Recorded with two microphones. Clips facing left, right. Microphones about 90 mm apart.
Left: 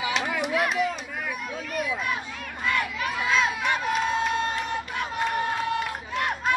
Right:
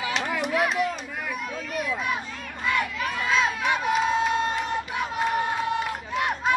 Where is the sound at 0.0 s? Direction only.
5° left (ahead or behind).